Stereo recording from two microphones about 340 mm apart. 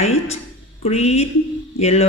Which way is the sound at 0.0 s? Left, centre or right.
Centre.